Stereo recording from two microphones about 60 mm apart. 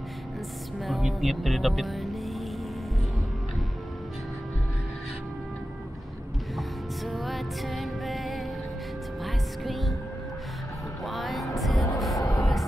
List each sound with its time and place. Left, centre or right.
0.8 s speech: centre
7.1 s music: centre
11.1 s music: centre
12.2 s music: left